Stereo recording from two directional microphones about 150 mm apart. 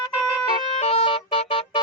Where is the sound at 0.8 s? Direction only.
45° left (ahead or behind).